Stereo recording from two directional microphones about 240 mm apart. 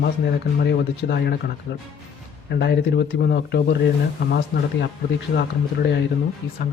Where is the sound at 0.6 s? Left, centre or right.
Left.